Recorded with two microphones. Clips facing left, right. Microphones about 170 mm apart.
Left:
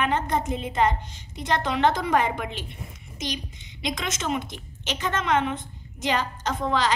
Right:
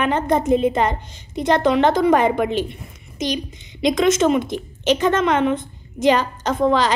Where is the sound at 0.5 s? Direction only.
85° right.